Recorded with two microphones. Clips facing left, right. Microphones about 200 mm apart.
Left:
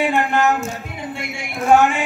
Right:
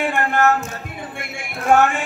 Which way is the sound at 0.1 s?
55° right (ahead or behind).